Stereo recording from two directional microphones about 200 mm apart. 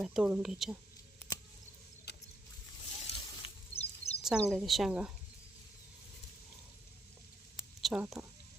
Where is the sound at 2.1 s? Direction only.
55° left (ahead or behind).